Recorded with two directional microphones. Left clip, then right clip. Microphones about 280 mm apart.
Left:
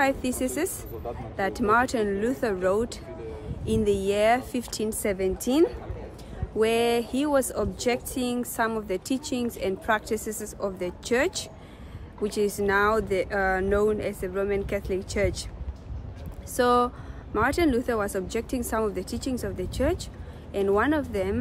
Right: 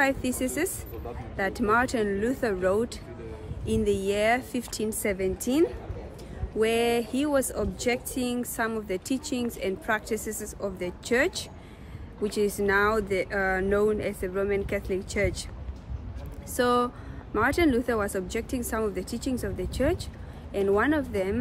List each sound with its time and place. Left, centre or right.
0.0 s speech: centre
16.5 s speech: centre